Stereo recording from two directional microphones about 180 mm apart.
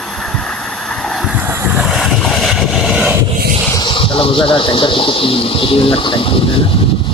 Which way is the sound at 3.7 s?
25° left (ahead or behind).